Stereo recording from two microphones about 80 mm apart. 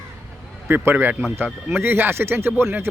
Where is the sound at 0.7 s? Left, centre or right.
Right.